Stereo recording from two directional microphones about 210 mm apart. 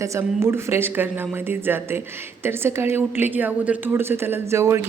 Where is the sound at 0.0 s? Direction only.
15° right (ahead or behind).